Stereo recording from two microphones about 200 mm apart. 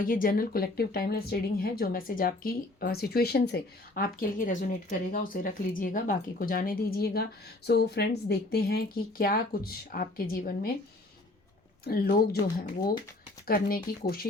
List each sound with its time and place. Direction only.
0.0 s a woman's voice: 45° left (ahead or behind)
11.9 s a woman's voice: 50° left (ahead or behind)
13.5 s a woman's voice: 45° left (ahead or behind)